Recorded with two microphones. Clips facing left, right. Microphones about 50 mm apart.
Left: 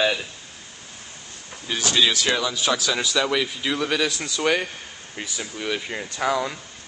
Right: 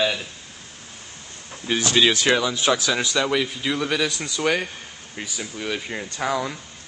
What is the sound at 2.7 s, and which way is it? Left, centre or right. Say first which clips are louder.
A man's voice: right 2 dB; centre.